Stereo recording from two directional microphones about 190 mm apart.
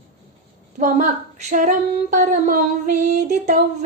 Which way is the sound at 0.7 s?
45° right (ahead or behind).